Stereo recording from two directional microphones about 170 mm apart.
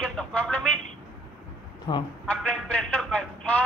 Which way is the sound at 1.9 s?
25° left (ahead or behind).